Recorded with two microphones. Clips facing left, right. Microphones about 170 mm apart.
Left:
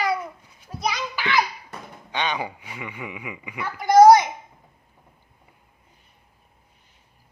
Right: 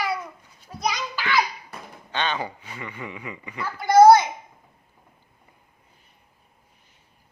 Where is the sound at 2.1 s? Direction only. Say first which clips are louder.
Even; 15° left (ahead or behind).